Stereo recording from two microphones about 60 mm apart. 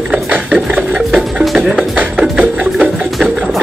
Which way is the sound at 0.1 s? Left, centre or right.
Right.